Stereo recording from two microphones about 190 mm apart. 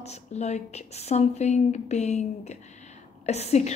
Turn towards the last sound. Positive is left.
turn(degrees=35)  # may be behind; listen again after turning